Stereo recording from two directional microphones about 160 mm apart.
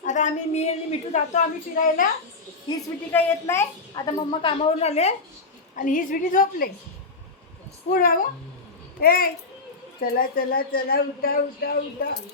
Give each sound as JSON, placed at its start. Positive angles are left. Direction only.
{"t": 0.0, "sound": "a woman's voice", "side_deg": 50}
{"t": 1.7, "sound": "a woman's voice", "side_deg": 60}
{"t": 3.1, "sound": "a child's voice", "side_deg": 15}
{"t": 5.7, "sound": "a woman's voice", "side_deg": 55}
{"t": 7.9, "sound": "a woman's voice", "side_deg": 65}